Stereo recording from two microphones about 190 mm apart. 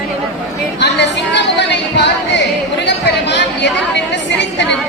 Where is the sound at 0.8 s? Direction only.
65° left (ahead or behind).